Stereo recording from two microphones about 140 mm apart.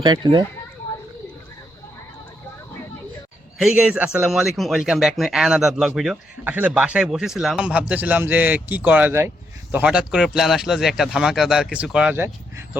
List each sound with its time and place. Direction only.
0.0 s speech: 35° right (ahead or behind)
3.6 s a man's voice: 5° right (ahead or behind)
12.1 s a man's voice: 15° right (ahead or behind)